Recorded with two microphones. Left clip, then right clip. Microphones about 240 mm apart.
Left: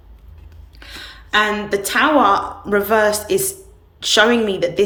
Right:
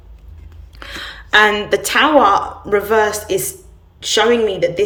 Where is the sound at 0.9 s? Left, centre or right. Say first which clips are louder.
Right 5 dB; centre.